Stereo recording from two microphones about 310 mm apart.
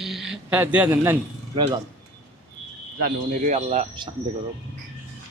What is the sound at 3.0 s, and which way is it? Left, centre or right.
Speech, right.